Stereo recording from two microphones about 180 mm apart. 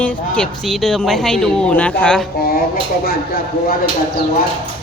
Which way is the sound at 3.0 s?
60° left (ahead or behind).